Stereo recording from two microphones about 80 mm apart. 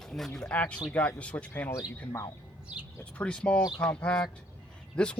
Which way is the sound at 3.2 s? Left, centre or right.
Centre.